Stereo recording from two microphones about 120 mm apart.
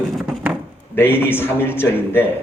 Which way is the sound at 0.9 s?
20° left (ahead or behind).